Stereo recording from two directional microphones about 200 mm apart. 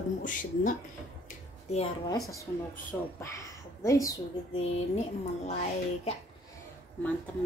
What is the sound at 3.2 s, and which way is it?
Speech, 15° left (ahead or behind).